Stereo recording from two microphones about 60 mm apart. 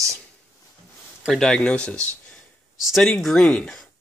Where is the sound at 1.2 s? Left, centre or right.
Centre.